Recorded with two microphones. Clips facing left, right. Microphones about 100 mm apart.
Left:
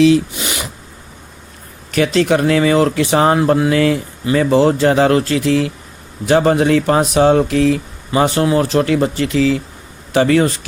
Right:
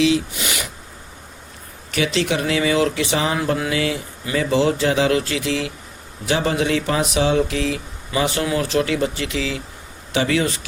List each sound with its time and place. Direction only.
2.0 s speech: 45° left (ahead or behind)
3.3 s speech: 35° left (ahead or behind)